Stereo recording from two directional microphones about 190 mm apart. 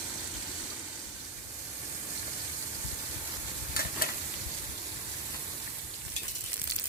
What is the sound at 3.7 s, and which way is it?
Stir, 50° left (ahead or behind).